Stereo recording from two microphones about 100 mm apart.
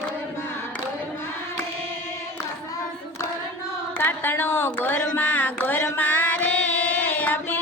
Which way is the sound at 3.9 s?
20° left (ahead or behind).